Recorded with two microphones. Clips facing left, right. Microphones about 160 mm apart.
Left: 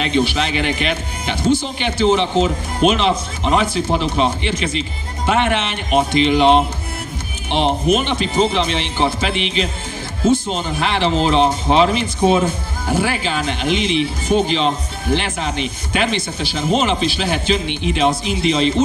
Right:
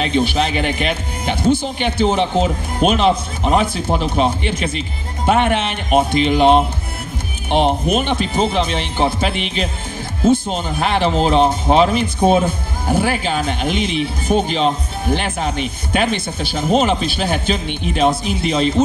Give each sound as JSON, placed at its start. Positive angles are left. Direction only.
{"t": 0.0, "sound": "speech", "side_deg": -50}